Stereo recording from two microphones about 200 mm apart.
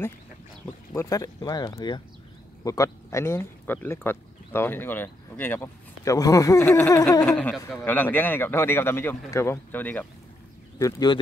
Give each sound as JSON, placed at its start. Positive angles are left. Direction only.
{"t": 0.9, "sound": "speech", "side_deg": 15}
{"t": 7.2, "sound": "speech", "side_deg": 5}